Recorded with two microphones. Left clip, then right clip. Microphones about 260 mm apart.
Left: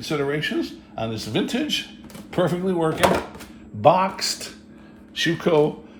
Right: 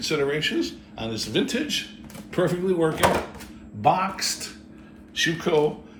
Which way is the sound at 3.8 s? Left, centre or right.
Left.